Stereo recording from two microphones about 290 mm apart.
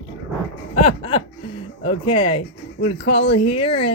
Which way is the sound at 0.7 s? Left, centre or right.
Centre.